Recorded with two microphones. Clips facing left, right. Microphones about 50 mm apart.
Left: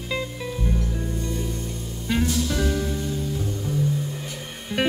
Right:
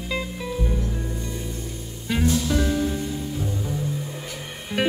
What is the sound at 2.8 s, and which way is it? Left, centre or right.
Music, centre.